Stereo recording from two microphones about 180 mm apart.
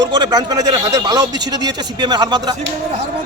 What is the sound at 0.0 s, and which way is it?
Speech, 25° right (ahead or behind).